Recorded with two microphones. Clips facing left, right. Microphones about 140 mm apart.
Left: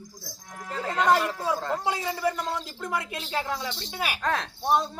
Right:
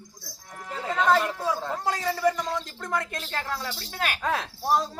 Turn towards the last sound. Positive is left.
turn(degrees=-5)  # may be behind; listen again after turning